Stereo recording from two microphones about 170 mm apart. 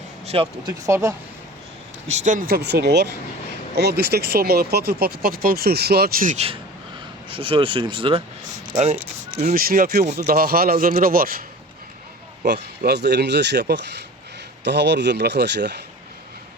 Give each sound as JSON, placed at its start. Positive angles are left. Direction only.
{"t": 0.3, "sound": "speech", "side_deg": -35}
{"t": 0.7, "sound": "speech", "side_deg": -15}
{"t": 2.0, "sound": "speech", "side_deg": -45}
{"t": 6.3, "sound": "speech", "side_deg": -35}
{"t": 8.8, "sound": "speech", "side_deg": -40}
{"t": 9.6, "sound": "speech", "side_deg": -55}
{"t": 12.5, "sound": "speech", "side_deg": -75}